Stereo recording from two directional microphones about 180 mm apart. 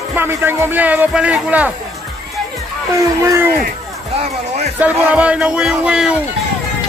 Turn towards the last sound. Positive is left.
turn(degrees=-5)  # may be behind; listen again after turning